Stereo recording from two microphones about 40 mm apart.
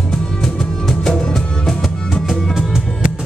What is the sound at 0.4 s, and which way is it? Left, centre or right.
Music, centre.